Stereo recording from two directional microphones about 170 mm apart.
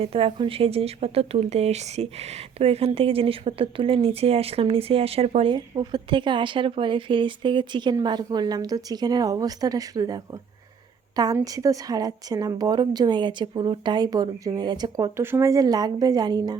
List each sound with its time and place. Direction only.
0.0 s speech: 35° right (ahead or behind)
11.4 s speech: 20° right (ahead or behind)